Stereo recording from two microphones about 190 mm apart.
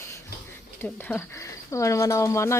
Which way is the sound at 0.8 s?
10° left (ahead or behind).